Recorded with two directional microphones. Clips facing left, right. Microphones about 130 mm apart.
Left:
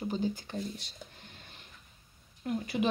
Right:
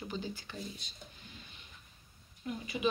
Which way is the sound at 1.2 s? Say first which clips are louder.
Left 1 dB; 60° left (ahead or behind).